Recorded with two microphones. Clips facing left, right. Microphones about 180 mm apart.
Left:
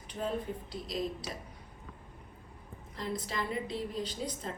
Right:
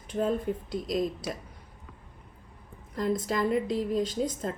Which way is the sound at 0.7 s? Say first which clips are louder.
Right 6 dB; 50° right (ahead or behind).